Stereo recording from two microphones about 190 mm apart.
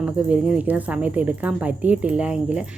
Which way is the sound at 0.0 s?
5° right (ahead or behind).